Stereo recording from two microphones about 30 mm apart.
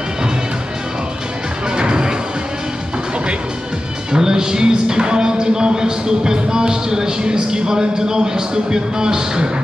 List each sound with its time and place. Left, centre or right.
1.8 s music: right
4.1 s music: right